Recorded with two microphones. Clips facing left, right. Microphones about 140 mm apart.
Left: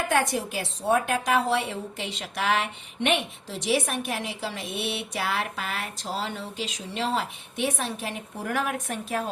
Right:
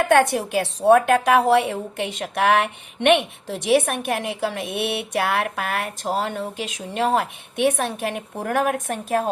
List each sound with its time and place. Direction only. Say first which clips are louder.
0.1 s a woman's voice: right 8 dB; 60° right (ahead or behind)